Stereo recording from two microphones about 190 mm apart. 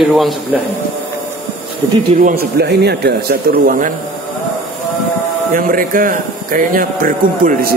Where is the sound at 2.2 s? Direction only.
55° right (ahead or behind).